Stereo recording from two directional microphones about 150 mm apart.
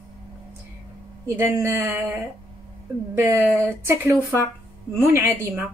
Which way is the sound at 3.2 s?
15° right (ahead or behind).